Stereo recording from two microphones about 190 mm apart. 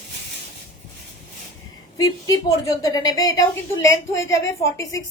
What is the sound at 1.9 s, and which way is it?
A woman's voice, 20° left (ahead or behind).